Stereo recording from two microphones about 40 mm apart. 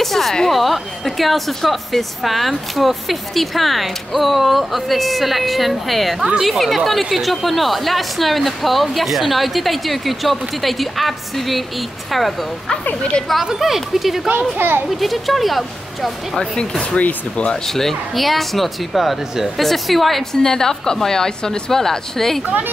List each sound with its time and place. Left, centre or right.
0.0 s a woman's voice: centre
13.6 s a woman's voice: centre
16.3 s a woman's voice: centre
16.9 s speech: left
17.6 s a woman's voice: centre
20.4 s a woman's voice: centre